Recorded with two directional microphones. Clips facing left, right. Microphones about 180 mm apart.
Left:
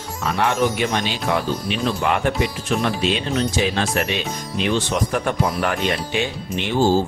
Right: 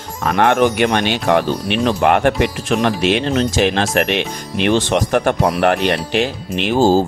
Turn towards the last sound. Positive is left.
turn(degrees=-40)  # may be behind; listen again after turning